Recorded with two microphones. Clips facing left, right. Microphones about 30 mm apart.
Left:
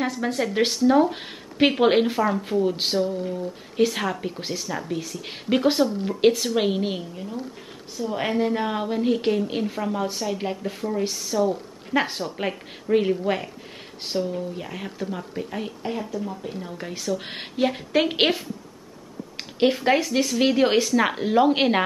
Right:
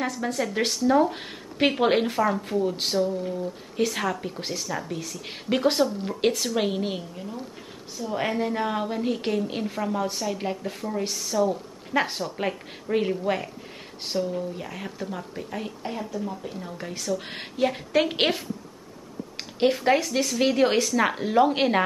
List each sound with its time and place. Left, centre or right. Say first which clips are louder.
0.0 s a woman's voice: left 2 dB; centre
19.3 s a woman's voice: left 2 dB; centre